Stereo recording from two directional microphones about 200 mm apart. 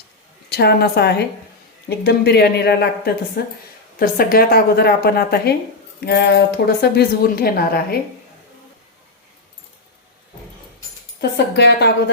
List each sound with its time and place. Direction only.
0.5 s a woman's voice: 55° left (ahead or behind)
11.2 s a woman's voice: 60° left (ahead or behind)